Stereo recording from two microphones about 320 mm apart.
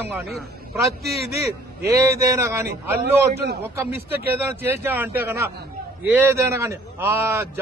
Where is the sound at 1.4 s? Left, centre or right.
Centre.